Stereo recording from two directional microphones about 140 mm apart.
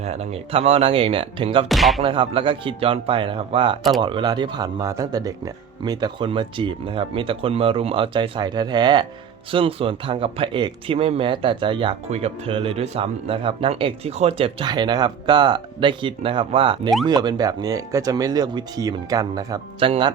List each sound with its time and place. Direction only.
0.0 s speech: 50° right (ahead or behind)
1.6 s speech: centre (ahead or behind)
2.0 s speech: 35° right (ahead or behind)
17.1 s speech: 30° right (ahead or behind)
19.8 s speech: 35° right (ahead or behind)